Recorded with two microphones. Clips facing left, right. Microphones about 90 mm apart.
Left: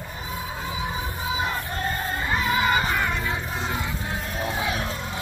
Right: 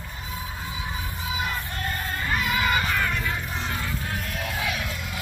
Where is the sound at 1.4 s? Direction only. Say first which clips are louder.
Left 1 dB; 30° left (ahead or behind).